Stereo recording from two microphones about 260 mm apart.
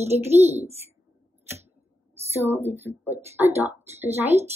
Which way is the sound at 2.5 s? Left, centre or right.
Centre.